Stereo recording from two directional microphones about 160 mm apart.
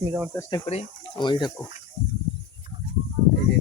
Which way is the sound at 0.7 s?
40° left (ahead or behind).